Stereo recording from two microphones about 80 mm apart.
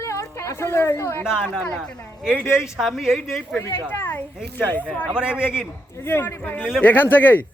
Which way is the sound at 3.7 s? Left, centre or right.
Left.